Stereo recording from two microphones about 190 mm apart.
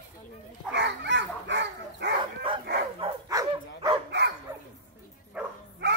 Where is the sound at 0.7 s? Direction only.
65° right (ahead or behind).